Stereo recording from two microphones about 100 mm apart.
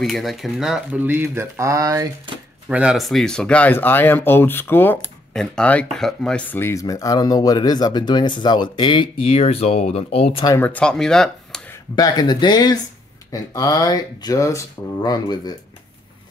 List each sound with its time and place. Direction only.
0.0 s speech: centre (ahead or behind)
1.0 s speech: 20° right (ahead or behind); by 2.0 s 35° right (ahead or behind)
2.7 s speech: 10° right (ahead or behind)
3.0 s speech: centre (ahead or behind); by 5.1 s 20° left (ahead or behind)
5.3 s speech: 5° left (ahead or behind)
6.5 s speech: 25° left (ahead or behind); by 9.0 s 50° left (ahead or behind)
9.2 s speech: 75° left (ahead or behind)
10.6 s speech: 15° left (ahead or behind)
11.9 s speech: 45° left (ahead or behind)